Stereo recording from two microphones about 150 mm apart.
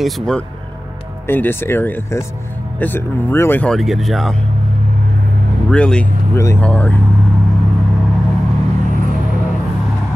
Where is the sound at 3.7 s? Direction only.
Centre (ahead or behind).